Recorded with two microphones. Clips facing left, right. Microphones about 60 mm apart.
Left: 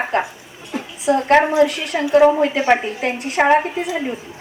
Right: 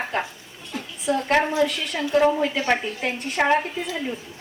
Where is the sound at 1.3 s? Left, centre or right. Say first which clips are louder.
Left 7 dB; left.